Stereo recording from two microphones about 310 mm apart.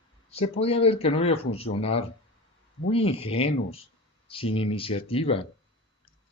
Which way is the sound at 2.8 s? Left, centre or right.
Centre.